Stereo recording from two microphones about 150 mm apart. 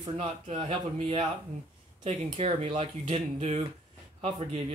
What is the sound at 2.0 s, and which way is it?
Speech, 45° right (ahead or behind).